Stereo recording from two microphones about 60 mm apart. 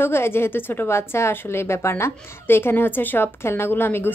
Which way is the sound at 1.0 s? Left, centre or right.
Left.